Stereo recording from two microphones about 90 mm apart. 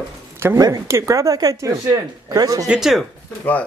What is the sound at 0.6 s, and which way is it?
Speech, 35° right (ahead or behind).